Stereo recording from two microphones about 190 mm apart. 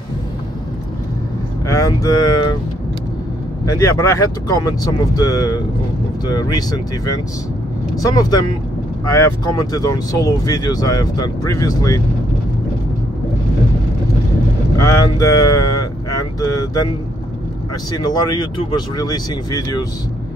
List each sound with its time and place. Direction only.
1.7 s speech: 20° left (ahead or behind)
3.6 s speech: 15° left (ahead or behind)
14.8 s a sound: 15° left (ahead or behind)
17.9 s speech: 20° left (ahead or behind)